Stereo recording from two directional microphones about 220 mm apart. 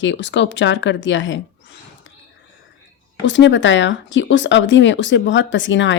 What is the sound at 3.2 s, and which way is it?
Speech, 55° left (ahead or behind).